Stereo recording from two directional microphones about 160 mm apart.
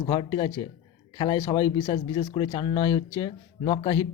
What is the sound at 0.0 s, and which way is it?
Speech, 30° left (ahead or behind).